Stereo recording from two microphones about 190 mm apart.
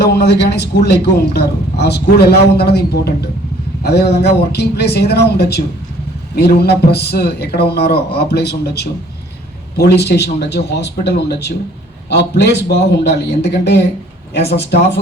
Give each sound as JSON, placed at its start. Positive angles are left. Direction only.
{"t": 0.0, "sound": "a man's voice", "side_deg": 60}